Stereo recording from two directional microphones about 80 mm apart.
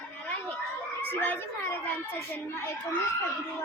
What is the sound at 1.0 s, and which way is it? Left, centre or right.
Children playing, left.